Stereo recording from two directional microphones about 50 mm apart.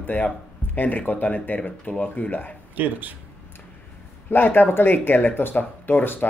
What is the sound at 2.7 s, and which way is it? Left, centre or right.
Speech, right.